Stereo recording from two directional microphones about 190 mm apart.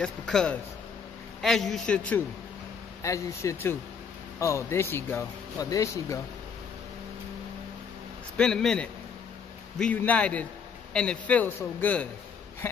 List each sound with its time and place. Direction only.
0.0 s a man's voice: 5° left (ahead or behind)
8.4 s a man's voice: 5° left (ahead or behind)